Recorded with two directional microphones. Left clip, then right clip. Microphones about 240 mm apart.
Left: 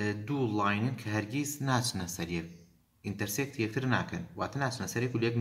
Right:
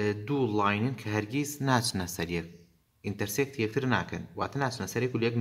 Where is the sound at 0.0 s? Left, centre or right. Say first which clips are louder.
Right 4 dB; right.